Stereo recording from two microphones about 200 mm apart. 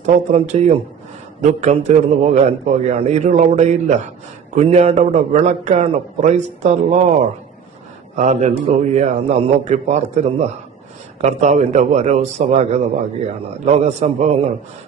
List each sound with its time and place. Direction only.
0.0 s a man's voice: 35° right (ahead or behind)